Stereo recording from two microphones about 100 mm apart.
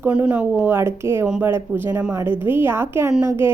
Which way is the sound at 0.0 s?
15° right (ahead or behind).